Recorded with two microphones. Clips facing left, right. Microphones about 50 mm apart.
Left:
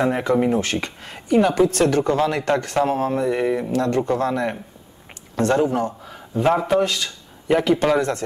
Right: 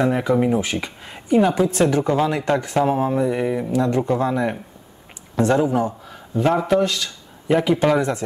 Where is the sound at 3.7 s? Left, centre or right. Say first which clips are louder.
Right 1 dB; centre.